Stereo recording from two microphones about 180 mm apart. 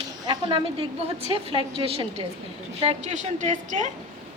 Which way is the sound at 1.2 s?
30° right (ahead or behind).